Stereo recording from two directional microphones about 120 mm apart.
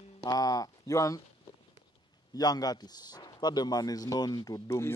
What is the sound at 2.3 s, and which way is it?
A man's voice, 35° left (ahead or behind).